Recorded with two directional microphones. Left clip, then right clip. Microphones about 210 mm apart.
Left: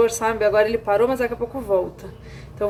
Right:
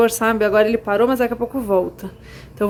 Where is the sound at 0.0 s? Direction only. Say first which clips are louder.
Right 2 dB; 35° right (ahead or behind).